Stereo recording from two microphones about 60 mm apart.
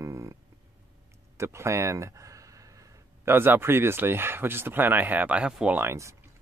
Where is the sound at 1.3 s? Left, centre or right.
Right.